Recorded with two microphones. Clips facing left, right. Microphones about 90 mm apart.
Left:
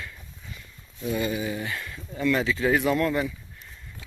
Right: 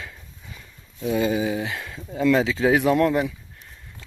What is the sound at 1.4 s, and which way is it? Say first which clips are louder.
Speech: right 5 dB; 90° right.